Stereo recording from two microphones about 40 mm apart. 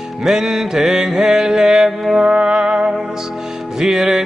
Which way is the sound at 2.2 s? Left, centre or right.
Right.